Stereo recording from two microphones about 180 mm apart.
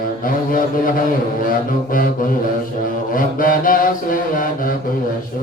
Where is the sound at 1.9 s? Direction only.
50° left (ahead or behind).